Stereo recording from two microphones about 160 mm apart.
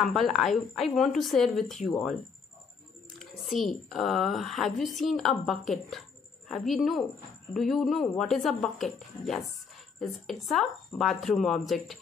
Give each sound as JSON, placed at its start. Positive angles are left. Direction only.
{"t": 0.0, "sound": "speech", "side_deg": 0}
{"t": 3.2, "sound": "speech", "side_deg": 0}